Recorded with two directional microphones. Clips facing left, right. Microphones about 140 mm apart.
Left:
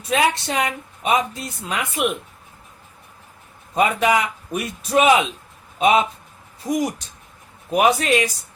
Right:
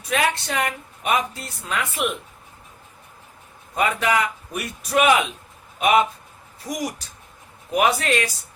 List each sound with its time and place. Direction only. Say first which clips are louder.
0.1 s a woman's voice: left 3 dB; 20° left (ahead or behind)
3.8 s a woman's voice: left 3 dB; 20° left (ahead or behind)
6.7 s a woman's voice: left 6 dB; 25° left (ahead or behind)